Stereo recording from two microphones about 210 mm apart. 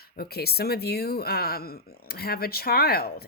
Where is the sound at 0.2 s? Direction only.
50° left (ahead or behind).